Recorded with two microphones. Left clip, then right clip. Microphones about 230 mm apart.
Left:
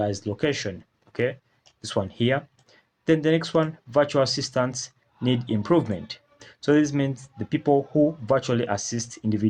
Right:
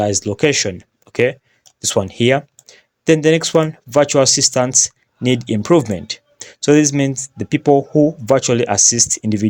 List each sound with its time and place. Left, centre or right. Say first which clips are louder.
0.0 s speech: right 10 dB; right